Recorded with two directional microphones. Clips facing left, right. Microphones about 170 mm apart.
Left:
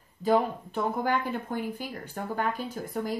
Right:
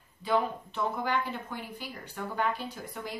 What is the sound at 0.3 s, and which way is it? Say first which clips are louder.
Speech: left 4 dB; 45° left (ahead or behind).